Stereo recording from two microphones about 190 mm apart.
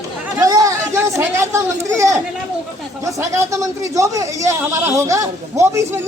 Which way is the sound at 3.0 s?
15° right (ahead or behind).